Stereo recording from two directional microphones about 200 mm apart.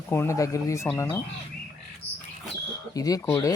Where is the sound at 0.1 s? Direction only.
15° left (ahead or behind).